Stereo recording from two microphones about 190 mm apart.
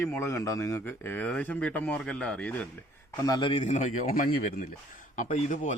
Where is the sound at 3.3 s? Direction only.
25° left (ahead or behind).